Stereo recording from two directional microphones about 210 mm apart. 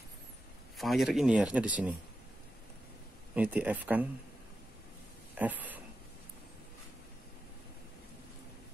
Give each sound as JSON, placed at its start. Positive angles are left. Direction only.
{"t": 0.7, "sound": "speech", "side_deg": 0}
{"t": 3.3, "sound": "speech", "side_deg": -5}
{"t": 5.3, "sound": "speech", "side_deg": -10}